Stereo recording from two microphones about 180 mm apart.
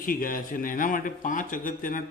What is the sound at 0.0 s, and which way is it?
A man's voice, 50° left (ahead or behind).